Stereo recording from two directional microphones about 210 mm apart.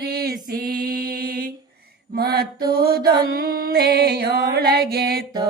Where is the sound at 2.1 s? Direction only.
50° right (ahead or behind).